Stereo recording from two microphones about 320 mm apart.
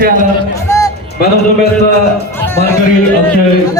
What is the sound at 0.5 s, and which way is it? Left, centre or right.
Music, centre.